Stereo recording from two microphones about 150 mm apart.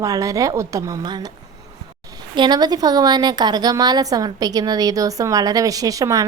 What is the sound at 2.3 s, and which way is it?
A woman's voice, 30° right (ahead or behind).